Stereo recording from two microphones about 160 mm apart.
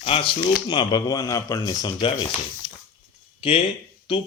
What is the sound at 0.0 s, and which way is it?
A man's voice, 35° left (ahead or behind).